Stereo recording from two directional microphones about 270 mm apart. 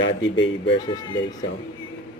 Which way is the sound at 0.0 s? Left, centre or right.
Left.